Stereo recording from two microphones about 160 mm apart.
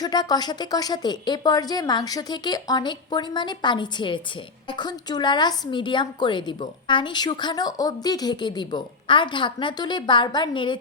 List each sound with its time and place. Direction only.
0.0 s a woman's voice: 25° left (ahead or behind)